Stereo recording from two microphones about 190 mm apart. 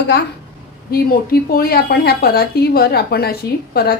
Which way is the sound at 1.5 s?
50° left (ahead or behind).